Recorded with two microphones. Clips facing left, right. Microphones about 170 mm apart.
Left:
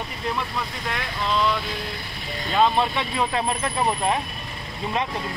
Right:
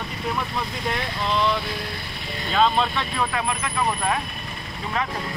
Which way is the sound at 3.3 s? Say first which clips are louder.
Left 2 dB; 30° left (ahead or behind).